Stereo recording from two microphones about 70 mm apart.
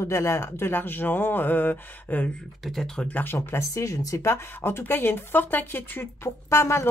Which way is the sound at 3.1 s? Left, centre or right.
Left.